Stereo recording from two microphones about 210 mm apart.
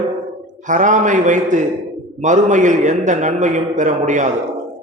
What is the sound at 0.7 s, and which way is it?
A man's voice, 35° right (ahead or behind).